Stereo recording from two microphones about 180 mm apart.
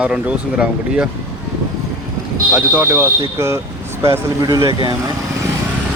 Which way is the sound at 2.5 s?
10° right (ahead or behind).